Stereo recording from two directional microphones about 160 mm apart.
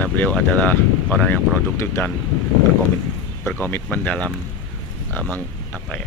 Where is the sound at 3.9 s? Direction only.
10° left (ahead or behind).